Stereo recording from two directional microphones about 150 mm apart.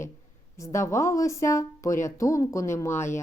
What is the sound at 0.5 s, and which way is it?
A woman's voice, 20° left (ahead or behind).